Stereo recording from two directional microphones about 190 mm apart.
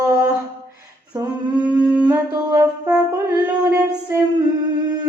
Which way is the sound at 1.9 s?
5° right (ahead or behind).